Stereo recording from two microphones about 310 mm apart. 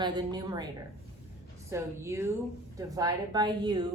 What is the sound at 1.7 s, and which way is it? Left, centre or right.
A woman's voice, centre.